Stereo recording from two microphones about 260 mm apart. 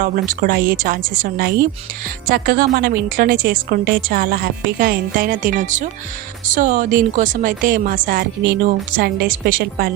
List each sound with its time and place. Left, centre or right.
0.0 s a woman's voice: right